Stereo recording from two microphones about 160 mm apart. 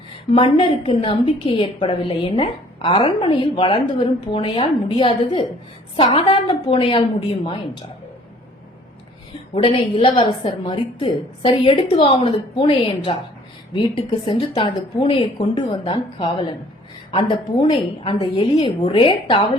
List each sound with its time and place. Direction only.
0.3 s a woman's voice: 35° left (ahead or behind)
9.6 s a woman's voice: 30° left (ahead or behind)